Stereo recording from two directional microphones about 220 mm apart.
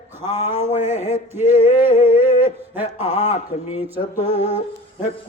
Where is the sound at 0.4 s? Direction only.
30° left (ahead or behind).